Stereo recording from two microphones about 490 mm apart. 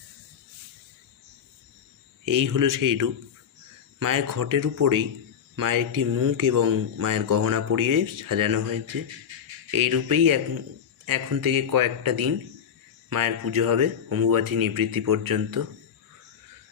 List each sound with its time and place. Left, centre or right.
2.2 s speech: right